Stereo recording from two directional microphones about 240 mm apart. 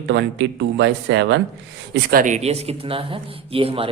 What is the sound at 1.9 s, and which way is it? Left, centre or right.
Speech, right.